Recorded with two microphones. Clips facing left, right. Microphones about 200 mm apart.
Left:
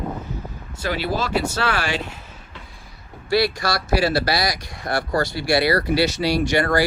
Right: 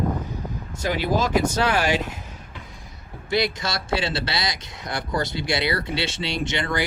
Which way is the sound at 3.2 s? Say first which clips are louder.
Left 4 dB; 20° right (ahead or behind).